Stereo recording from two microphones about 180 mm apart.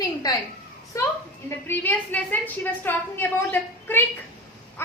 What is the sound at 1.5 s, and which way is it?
A woman's voice, 10° left (ahead or behind).